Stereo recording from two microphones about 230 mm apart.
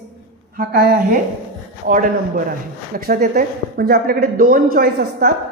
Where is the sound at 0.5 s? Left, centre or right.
Right.